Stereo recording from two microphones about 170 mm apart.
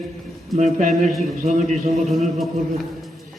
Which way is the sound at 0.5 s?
45° right (ahead or behind).